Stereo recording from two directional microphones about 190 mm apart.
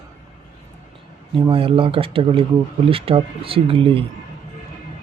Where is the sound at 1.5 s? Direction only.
30° right (ahead or behind).